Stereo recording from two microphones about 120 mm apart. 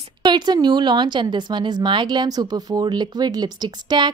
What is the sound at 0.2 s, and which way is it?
A woman's voice, 40° right (ahead or behind).